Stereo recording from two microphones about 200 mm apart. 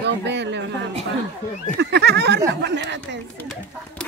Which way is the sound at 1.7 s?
55° right (ahead or behind).